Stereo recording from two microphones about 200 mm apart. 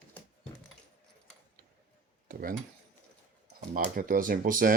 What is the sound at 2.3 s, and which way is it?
Speech, 45° right (ahead or behind).